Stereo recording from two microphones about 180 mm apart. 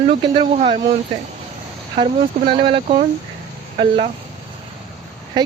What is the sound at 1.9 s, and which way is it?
Speech, 30° right (ahead or behind).